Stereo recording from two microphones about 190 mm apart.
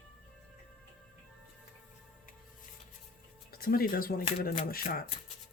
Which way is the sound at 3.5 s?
50° left (ahead or behind).